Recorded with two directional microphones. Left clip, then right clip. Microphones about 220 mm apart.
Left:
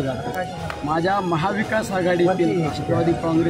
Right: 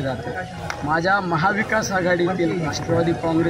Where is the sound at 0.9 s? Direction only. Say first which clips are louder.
Right 2 dB; 5° right (ahead or behind).